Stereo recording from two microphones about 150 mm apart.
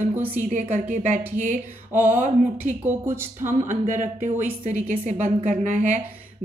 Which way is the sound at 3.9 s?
55° right (ahead or behind).